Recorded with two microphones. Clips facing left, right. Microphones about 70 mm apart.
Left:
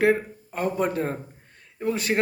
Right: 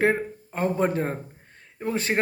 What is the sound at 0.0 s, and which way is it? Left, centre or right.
A man's voice, right.